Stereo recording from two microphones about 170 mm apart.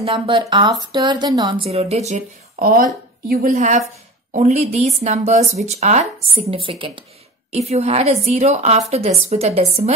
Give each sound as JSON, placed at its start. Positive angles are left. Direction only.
{"t": 0.0, "sound": "speech", "side_deg": -30}
{"t": 3.5, "sound": "a woman's voice", "side_deg": -45}